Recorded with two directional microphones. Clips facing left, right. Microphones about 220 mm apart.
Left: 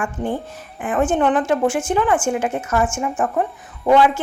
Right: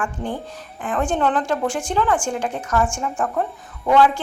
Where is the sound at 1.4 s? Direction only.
5° left (ahead or behind).